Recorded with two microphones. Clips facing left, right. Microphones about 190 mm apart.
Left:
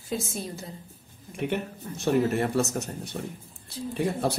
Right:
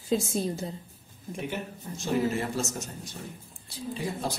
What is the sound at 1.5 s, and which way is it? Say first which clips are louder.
Speech: left 5 dB; 60° left (ahead or behind).